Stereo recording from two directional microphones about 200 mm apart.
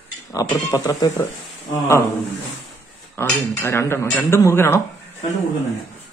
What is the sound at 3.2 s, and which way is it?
Speech, 10° left (ahead or behind).